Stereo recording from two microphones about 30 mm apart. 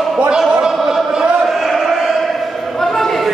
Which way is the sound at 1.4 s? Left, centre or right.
Centre.